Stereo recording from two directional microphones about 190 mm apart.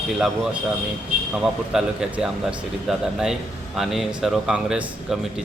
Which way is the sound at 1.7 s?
5° right (ahead or behind).